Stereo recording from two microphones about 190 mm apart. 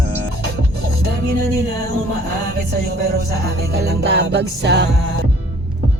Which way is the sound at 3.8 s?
60° right (ahead or behind).